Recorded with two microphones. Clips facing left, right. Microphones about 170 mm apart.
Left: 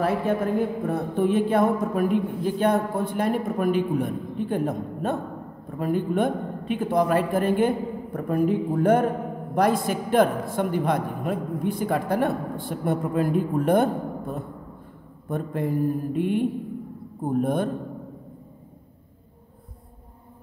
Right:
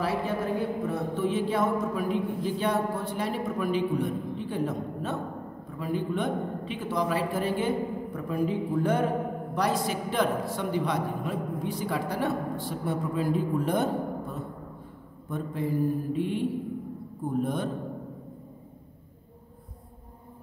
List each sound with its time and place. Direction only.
0.0 s speech: 55° left (ahead or behind)
15.2 s speech: 55° left (ahead or behind)